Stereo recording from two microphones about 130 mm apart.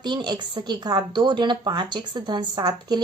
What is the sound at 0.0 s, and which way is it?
A woman's voice, 35° right (ahead or behind).